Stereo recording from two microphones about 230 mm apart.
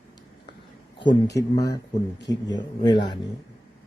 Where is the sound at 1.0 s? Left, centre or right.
Centre.